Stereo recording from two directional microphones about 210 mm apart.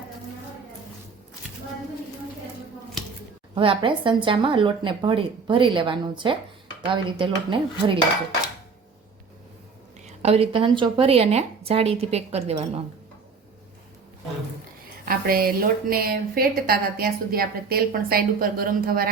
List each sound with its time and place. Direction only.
3.5 s speech: 25° right (ahead or behind)
10.2 s speech: 30° right (ahead or behind)
15.0 s a woman's voice: 45° right (ahead or behind)